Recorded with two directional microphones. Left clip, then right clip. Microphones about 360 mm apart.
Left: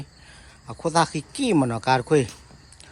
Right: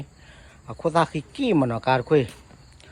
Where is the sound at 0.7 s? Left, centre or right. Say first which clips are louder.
Even; centre.